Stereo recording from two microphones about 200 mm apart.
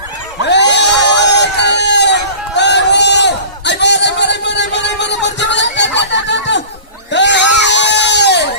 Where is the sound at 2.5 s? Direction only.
60° left (ahead or behind).